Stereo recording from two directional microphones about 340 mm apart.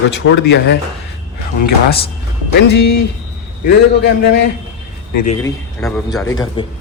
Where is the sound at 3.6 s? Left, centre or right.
Left.